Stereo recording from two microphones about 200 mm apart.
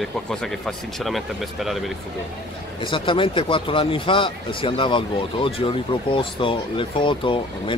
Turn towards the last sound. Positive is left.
turn(degrees=25)  # may be behind; listen again after turning